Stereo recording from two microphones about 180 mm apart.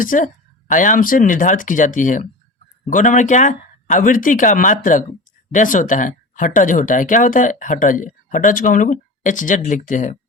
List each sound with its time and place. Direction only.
0.0 s speech: 50° left (ahead or behind)